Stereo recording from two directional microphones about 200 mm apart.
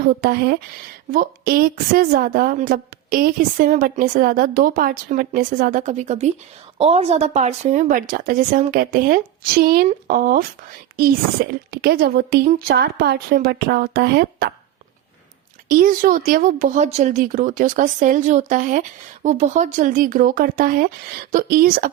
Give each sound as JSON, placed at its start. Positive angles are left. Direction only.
{"t": 0.0, "sound": "a woman's voice", "side_deg": -50}
{"t": 11.7, "sound": "a woman's voice", "side_deg": -50}
{"t": 15.7, "sound": "a woman's voice", "side_deg": -45}